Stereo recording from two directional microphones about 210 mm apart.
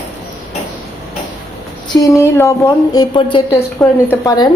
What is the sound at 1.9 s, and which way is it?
Speech, 15° left (ahead or behind).